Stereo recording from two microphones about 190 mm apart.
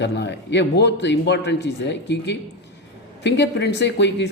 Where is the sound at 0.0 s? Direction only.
65° left (ahead or behind).